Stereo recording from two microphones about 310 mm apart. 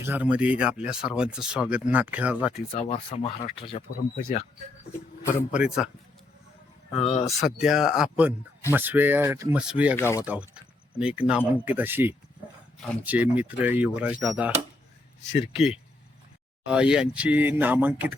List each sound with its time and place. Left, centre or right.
0.0 s speech: centre
2.7 s speech: centre
4.2 s speech: left
5.5 s speech: centre
6.9 s speech: centre
7.3 s speech: centre
9.9 s speech: centre
10.2 s speech: centre
15.5 s speech: centre